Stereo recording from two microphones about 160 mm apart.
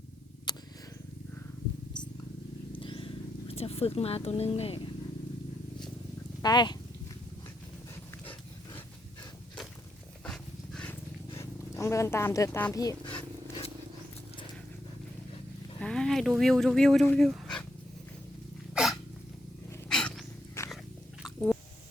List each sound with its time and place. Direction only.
0.5 s a sound: 25° left (ahead or behind)
2.7 s music: 30° left (ahead or behind)
6.4 s speech: 25° left (ahead or behind)
10.2 s dog: 5° left (ahead or behind)
11.3 s speech: 20° left (ahead or behind)
15.8 s speech: 5° left (ahead or behind)
18.7 s hiccup: 5° right (ahead or behind)
19.9 s dog: 5° left (ahead or behind)
20.6 s biting: 15° left (ahead or behind)
21.2 s squish: centre (ahead or behind)